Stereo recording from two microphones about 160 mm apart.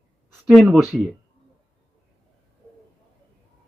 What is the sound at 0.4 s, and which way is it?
Speech, centre (ahead or behind).